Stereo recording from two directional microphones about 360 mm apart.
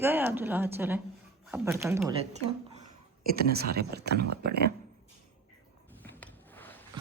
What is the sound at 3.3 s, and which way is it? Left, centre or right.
Speech, right.